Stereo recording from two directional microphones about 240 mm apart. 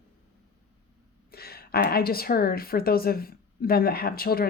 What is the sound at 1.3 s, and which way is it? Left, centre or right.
A woman's voice, left.